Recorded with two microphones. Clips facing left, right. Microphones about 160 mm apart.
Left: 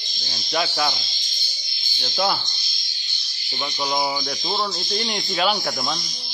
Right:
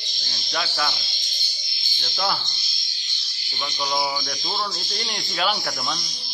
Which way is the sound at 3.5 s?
15° left (ahead or behind).